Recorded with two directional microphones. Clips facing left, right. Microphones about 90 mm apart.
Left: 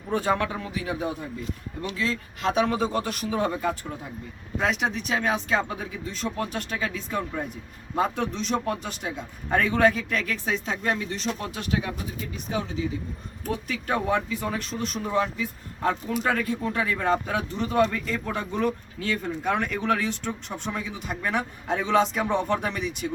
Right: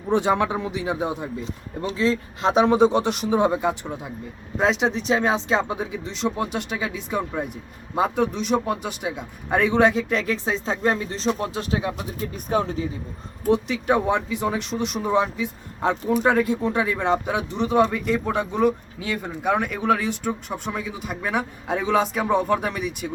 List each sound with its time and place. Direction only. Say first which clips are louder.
0.1 s a man's voice: right 5 dB; 20° right (ahead or behind)
12.2 s speech: right 8 dB; 45° right (ahead or behind)
13.5 s speech: right 8 dB; 20° right (ahead or behind)